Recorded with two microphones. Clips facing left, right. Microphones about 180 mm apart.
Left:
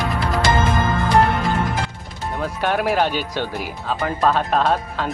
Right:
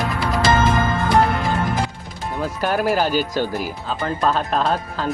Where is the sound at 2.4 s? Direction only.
Centre (ahead or behind).